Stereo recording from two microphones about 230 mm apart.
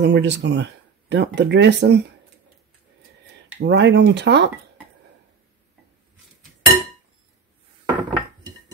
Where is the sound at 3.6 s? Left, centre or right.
Right.